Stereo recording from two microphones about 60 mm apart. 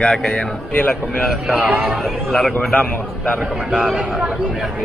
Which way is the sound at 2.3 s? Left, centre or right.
Centre.